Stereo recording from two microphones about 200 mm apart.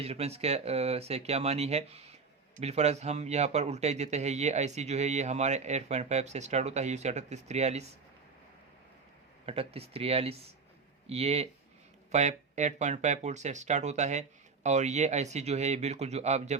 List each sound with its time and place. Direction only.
0.0 s speech: 30° right (ahead or behind)
9.5 s speech: 30° right (ahead or behind)